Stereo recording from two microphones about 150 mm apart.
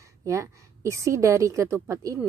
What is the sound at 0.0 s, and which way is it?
A woman's voice, 20° right (ahead or behind).